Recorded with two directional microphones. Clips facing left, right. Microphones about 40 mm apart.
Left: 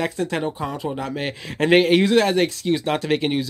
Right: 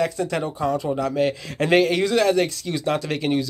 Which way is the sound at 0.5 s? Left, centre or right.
Centre.